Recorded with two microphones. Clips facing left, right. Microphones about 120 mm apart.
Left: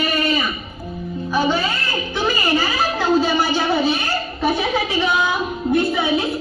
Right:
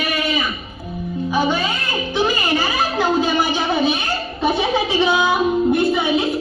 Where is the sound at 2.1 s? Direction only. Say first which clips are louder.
Right 1 dB; 15° right (ahead or behind).